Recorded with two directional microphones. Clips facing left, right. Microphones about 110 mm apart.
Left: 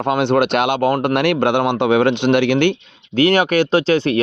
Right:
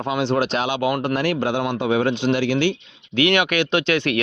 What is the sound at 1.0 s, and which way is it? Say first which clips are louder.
Speech: left 5 dB; 70° left (ahead or behind).